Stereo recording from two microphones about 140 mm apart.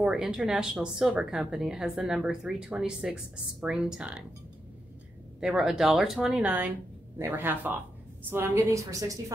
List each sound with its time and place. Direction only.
0.0 s speech: 5° right (ahead or behind)
5.4 s a woman's voice: 5° right (ahead or behind); by 9.2 s 25° right (ahead or behind)